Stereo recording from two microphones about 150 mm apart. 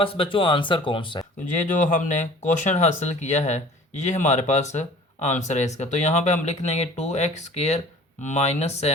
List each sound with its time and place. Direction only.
0.0 s speech: 35° left (ahead or behind)
1.9 s speech: 55° left (ahead or behind)